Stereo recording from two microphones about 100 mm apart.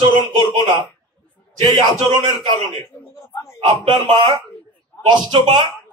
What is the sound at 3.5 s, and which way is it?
Speech, 75° right (ahead or behind).